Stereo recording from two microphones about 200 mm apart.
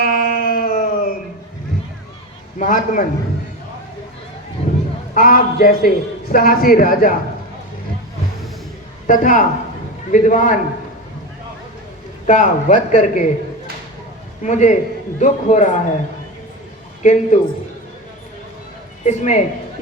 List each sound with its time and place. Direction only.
0.0 s a sound: 50° left (ahead or behind)
2.6 s a man's voice: 40° left (ahead or behind)
5.1 s a man's voice: 45° left (ahead or behind)
9.0 s a man's voice: 40° left (ahead or behind)
12.2 s a man's voice: 40° left (ahead or behind)
14.4 s a man's voice: 35° left (ahead or behind)
17.0 s a man's voice: 35° left (ahead or behind)
19.0 s a man's voice: 35° left (ahead or behind)